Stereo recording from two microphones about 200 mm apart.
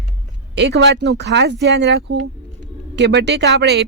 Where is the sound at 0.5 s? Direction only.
60° right (ahead or behind).